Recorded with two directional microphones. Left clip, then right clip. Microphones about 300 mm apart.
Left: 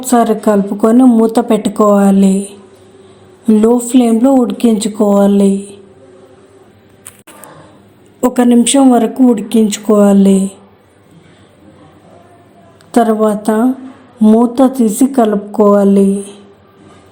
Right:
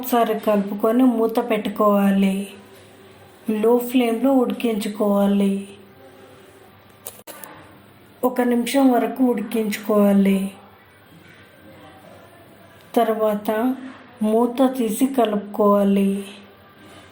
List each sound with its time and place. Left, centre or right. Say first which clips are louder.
0.0 s speech: left 8 dB; left
8.2 s speech: left 9 dB; left
12.9 s speech: left 8 dB; left